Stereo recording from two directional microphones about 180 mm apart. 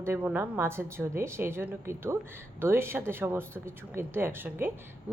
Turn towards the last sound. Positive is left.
turn(degrees=-10)  # may be behind; listen again after turning